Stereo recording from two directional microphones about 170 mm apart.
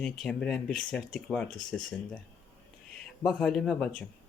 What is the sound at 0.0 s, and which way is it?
Speech, 5° left (ahead or behind).